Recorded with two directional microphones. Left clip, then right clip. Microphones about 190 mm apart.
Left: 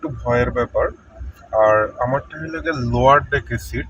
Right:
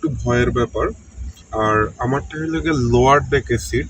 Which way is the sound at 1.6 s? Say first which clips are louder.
Left 3 dB; 10° right (ahead or behind).